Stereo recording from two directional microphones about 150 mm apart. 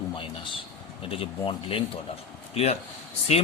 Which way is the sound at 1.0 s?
40° left (ahead or behind).